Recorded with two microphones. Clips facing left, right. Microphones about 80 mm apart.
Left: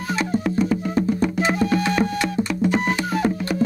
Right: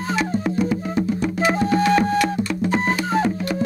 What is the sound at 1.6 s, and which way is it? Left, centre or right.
Music, right.